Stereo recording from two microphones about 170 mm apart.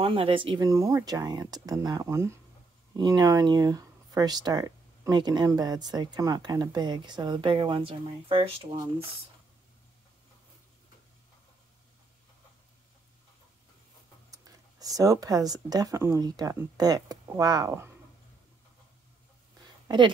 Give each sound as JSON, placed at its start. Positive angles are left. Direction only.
{"t": 0.0, "sound": "speech", "side_deg": -30}
{"t": 14.3, "sound": "speech", "side_deg": -20}
{"t": 19.9, "sound": "speech", "side_deg": -25}